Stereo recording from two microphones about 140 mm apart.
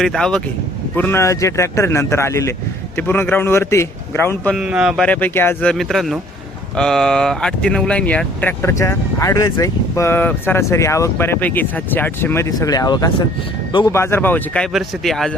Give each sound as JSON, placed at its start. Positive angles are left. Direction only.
{"t": 0.0, "sound": "speech", "side_deg": 5}
{"t": 0.9, "sound": "speech", "side_deg": 15}
{"t": 4.5, "sound": "speech", "side_deg": -5}
{"t": 5.0, "sound": "speech", "side_deg": 10}
{"t": 5.7, "sound": "speech", "side_deg": 0}